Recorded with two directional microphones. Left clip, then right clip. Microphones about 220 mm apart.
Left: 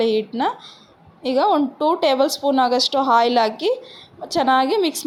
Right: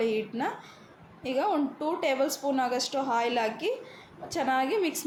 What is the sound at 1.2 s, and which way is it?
Speech, 30° left (ahead or behind).